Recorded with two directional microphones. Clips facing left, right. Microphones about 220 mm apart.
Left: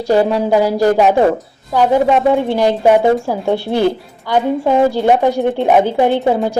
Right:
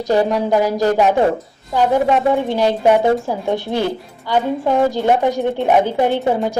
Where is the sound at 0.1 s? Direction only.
10° left (ahead or behind).